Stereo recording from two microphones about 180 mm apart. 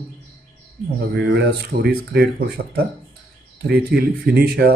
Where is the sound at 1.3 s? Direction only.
65° right (ahead or behind).